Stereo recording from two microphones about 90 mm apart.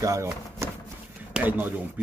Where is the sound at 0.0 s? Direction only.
35° right (ahead or behind).